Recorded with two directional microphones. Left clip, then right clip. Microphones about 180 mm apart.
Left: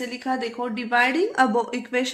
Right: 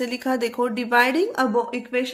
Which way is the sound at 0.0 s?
45° right (ahead or behind).